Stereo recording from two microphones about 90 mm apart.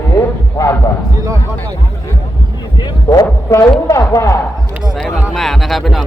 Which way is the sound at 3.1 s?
40° left (ahead or behind).